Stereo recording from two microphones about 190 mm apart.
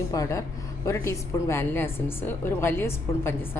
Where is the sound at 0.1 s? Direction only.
15° left (ahead or behind).